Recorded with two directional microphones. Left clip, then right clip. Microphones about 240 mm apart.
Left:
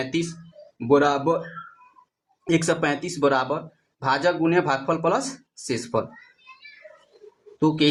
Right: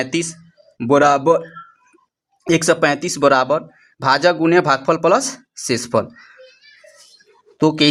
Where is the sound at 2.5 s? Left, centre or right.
Right.